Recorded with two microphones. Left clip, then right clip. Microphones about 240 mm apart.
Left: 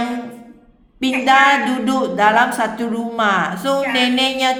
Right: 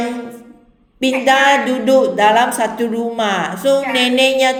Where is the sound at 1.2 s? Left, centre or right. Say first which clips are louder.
Even; centre.